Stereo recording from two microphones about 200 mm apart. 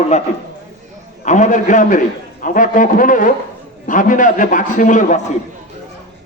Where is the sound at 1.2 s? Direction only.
40° left (ahead or behind).